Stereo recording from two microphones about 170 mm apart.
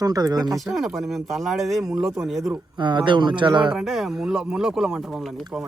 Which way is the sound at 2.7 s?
30° right (ahead or behind).